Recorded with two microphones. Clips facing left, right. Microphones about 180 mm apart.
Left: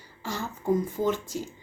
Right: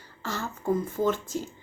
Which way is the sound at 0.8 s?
15° left (ahead or behind).